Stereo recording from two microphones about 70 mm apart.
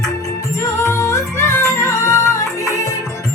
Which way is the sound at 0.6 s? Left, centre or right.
Left.